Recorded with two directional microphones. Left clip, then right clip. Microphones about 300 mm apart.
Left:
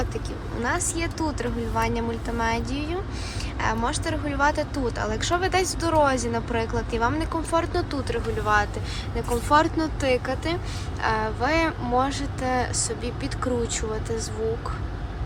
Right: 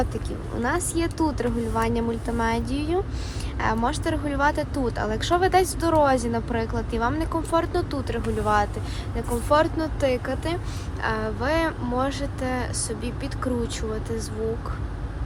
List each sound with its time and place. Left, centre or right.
0.6 s speech: centre